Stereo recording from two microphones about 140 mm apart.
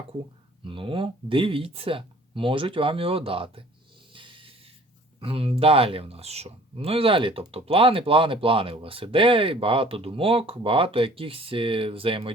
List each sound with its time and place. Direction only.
0.6 s speech: 40° right (ahead or behind)
4.1 s snake: 35° right (ahead or behind)
5.2 s speech: 40° right (ahead or behind)